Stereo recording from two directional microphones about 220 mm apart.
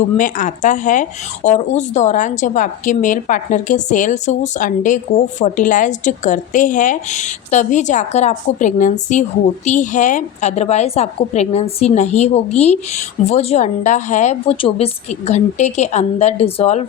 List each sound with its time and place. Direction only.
0.2 s a woman's voice: 35° left (ahead or behind)